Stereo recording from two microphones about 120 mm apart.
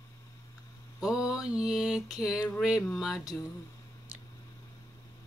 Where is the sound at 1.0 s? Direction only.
5° right (ahead or behind).